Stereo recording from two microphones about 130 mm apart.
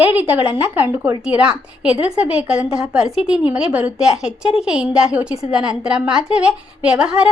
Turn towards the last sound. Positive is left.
turn(degrees=-5)  # may be behind; listen again after turning